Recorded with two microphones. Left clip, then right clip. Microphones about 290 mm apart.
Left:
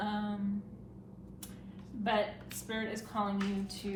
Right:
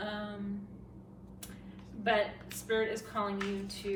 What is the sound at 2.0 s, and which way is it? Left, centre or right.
A woman's voice, centre.